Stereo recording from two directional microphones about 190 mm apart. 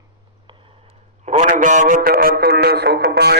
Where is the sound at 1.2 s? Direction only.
40° right (ahead or behind).